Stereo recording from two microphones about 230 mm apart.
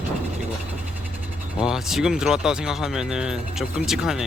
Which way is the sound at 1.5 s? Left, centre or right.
Centre.